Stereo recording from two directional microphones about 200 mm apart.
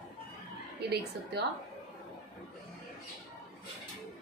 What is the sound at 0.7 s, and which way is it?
Speech, 55° right (ahead or behind).